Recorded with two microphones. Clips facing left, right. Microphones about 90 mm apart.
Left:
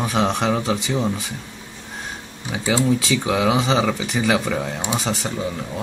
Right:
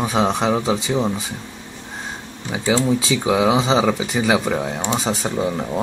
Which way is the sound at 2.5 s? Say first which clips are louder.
Right 1 dB; 20° right (ahead or behind).